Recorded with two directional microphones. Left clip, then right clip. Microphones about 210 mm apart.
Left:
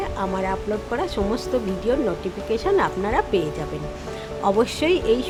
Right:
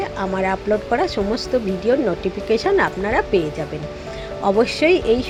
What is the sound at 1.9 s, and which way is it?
Speech, 10° right (ahead or behind).